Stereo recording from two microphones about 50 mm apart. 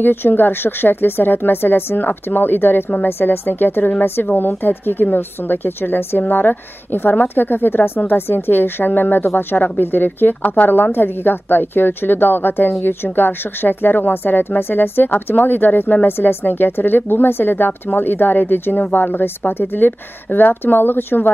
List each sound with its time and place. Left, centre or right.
0.0 s speech: left